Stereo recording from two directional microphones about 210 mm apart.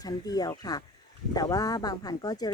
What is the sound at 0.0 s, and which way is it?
Speech, 20° left (ahead or behind).